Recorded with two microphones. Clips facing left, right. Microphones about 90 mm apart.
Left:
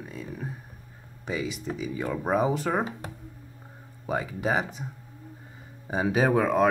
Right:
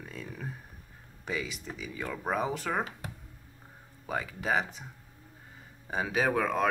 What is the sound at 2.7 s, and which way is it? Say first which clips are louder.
Speech: left 5 dB; 20° left (ahead or behind).